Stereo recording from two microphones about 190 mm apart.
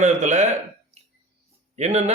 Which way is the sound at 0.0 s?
40° right (ahead or behind).